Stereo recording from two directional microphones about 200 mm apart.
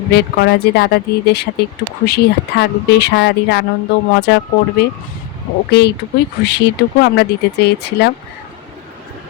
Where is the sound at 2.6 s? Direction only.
55° left (ahead or behind).